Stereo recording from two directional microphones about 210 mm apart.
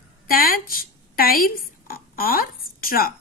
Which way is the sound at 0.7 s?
45° left (ahead or behind).